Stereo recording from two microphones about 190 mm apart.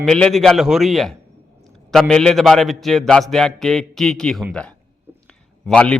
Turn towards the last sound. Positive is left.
turn(degrees=5)  # may be behind; listen again after turning